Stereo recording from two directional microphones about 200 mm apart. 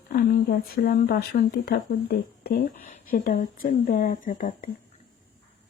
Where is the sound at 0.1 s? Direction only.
50° left (ahead or behind).